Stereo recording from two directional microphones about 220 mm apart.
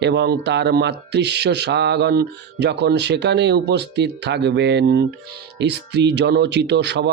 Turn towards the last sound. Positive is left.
turn(degrees=-50)  # may be behind; listen again after turning